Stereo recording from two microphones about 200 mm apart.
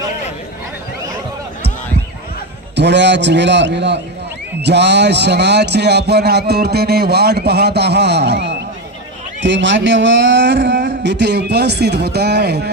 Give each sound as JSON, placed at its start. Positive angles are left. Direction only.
{"t": 2.7, "sound": "speech", "side_deg": -60}